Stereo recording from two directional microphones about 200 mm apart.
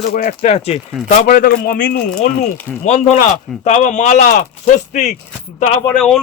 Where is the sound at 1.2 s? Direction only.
45° left (ahead or behind).